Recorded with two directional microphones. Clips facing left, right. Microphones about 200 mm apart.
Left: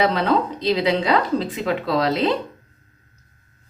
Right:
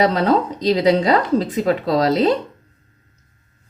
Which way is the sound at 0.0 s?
40° right (ahead or behind).